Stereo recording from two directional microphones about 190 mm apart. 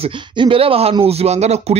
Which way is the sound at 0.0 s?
25° right (ahead or behind).